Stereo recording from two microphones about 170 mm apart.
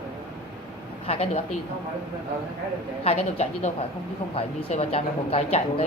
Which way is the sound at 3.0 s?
35° left (ahead or behind).